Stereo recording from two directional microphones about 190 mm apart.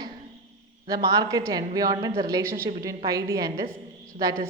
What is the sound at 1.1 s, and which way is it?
A woman's voice, 15° right (ahead or behind).